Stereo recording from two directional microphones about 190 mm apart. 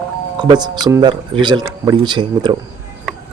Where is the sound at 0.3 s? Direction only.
20° right (ahead or behind).